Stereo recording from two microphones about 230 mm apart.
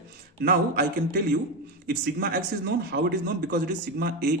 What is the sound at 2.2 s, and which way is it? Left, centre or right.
A man's voice, right.